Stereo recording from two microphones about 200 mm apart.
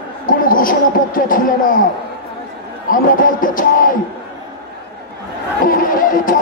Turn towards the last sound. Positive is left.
turn(degrees=45)  # may be behind; listen again after turning